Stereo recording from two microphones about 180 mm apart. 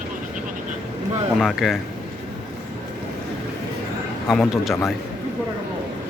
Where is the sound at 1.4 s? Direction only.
Centre (ahead or behind).